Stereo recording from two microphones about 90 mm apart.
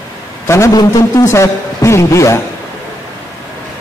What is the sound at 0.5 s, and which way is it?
A man's voice, 35° left (ahead or behind).